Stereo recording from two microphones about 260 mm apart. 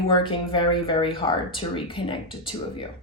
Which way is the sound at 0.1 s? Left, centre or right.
Centre.